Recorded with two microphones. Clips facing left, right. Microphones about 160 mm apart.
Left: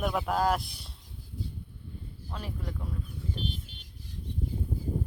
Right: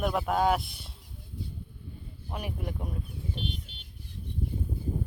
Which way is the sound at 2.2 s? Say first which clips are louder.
Right 3 dB; 20° right (ahead or behind).